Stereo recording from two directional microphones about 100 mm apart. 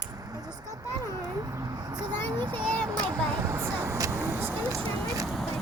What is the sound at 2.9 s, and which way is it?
Speech, 35° right (ahead or behind).